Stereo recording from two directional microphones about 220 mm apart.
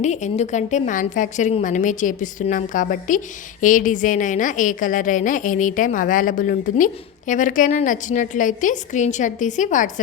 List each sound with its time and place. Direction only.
0.0 s a woman's voice: 30° left (ahead or behind)